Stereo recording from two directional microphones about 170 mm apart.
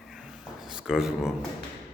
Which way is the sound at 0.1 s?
5° right (ahead or behind).